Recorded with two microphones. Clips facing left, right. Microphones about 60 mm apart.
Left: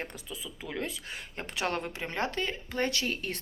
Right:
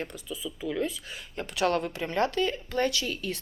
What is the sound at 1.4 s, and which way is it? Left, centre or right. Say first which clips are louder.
Speech: right 6 dB; left.